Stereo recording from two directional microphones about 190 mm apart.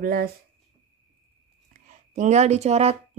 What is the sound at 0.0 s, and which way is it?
Speech, 50° right (ahead or behind).